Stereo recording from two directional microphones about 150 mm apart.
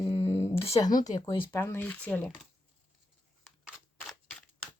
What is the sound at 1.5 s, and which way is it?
Speech, 15° left (ahead or behind).